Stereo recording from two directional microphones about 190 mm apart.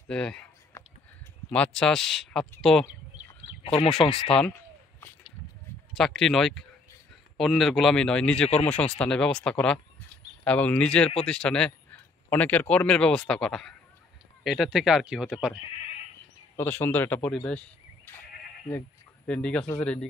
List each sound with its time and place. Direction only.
0.1 s speech: 5° left (ahead or behind)
0.7 s a sound: 15° left (ahead or behind)
1.5 s speech: 5° left (ahead or behind)
3.6 s speech: 30° left (ahead or behind)
4.3 s speech: 5° left (ahead or behind)
5.9 s speech: centre (ahead or behind)
16.5 s speech: 10° left (ahead or behind)